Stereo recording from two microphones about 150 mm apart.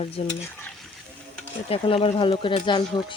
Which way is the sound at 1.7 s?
40° left (ahead or behind).